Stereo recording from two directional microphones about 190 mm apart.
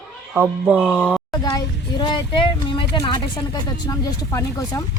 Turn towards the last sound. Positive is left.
turn(degrees=15)  # may be behind; listen again after turning